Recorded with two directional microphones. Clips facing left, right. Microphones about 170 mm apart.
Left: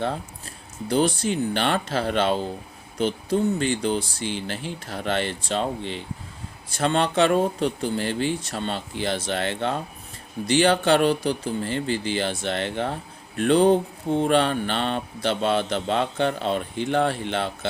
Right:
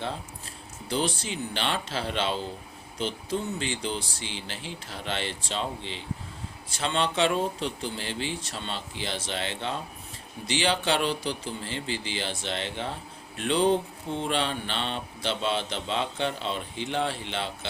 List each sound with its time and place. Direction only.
0.9 s speech: 50° left (ahead or behind)